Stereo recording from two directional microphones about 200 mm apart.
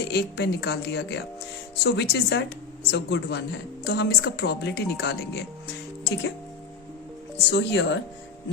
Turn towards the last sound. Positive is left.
turn(degrees=60)  # may be behind; listen again after turning